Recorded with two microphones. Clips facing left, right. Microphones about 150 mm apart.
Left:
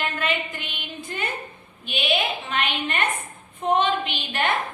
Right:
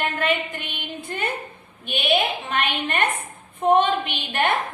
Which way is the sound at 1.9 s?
60° right (ahead or behind).